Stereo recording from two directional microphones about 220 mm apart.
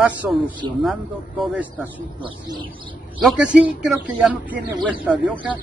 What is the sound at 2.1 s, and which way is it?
Speech, 20° right (ahead or behind).